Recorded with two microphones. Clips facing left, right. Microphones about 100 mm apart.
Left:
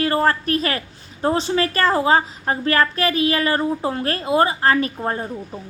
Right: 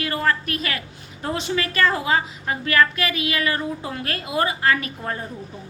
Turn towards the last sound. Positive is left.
turn(degrees=35)  # may be behind; listen again after turning